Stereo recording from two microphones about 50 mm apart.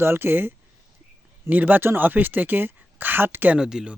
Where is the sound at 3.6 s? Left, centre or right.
Centre.